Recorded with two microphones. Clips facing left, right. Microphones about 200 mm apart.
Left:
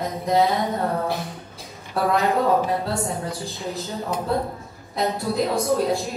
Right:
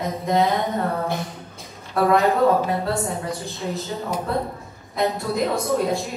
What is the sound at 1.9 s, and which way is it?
A woman's voice, centre (ahead or behind).